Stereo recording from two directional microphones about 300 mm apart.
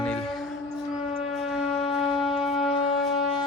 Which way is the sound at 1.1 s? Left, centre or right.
Centre.